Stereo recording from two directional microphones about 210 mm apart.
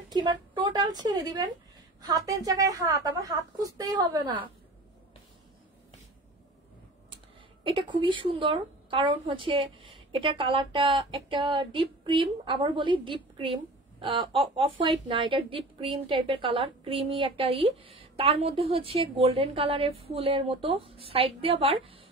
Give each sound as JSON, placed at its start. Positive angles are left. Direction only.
{"t": 0.1, "sound": "a woman's voice", "side_deg": -20}
{"t": 7.6, "sound": "speech", "side_deg": -25}